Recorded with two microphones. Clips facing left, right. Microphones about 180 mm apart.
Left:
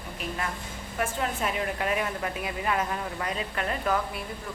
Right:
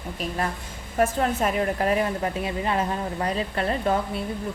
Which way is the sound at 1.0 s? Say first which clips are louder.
Right 7 dB; 40° right (ahead or behind).